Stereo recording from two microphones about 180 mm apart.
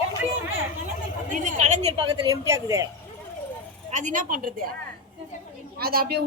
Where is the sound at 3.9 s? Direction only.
45° right (ahead or behind).